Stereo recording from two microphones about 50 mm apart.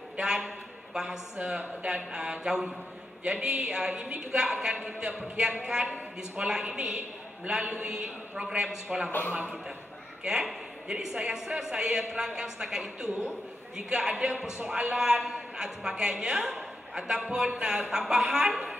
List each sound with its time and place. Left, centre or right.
0.2 s a man's voice: centre
10.2 s a woman's voice: centre